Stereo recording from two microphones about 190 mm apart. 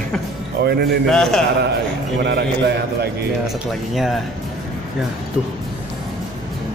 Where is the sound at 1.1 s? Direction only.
Centre (ahead or behind).